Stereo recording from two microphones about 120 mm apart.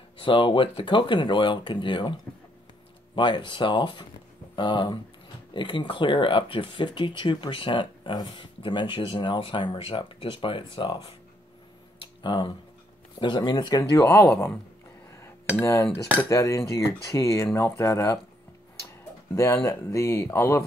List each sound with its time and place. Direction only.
0.2 s speech: 45° left (ahead or behind)
3.2 s speech: 40° left (ahead or behind)
12.0 s a sound: 40° left (ahead or behind)
13.2 s speech: 35° left (ahead or behind)
15.6 s speech: 25° left (ahead or behind)
19.3 s speech: 25° left (ahead or behind)